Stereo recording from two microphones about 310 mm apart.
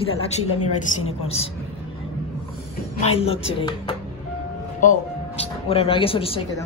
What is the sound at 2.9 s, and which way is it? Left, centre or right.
Speech, centre.